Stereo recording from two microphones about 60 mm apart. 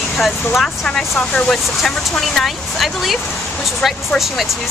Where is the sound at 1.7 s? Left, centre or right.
Centre.